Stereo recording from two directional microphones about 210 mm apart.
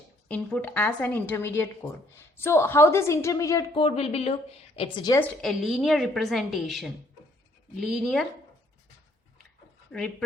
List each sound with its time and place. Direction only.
0.3 s a woman's voice: 5° left (ahead or behind)
3.8 s a woman's voice: 30° left (ahead or behind)
5.4 s speech: centre (ahead or behind)
9.9 s speech: 5° left (ahead or behind)